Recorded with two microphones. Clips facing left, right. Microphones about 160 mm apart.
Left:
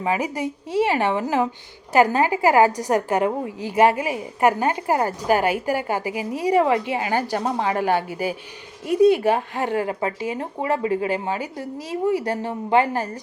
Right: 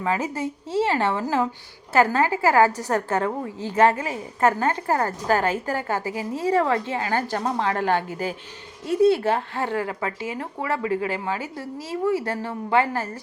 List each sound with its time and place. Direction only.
0.0 s a woman's voice: 15° left (ahead or behind)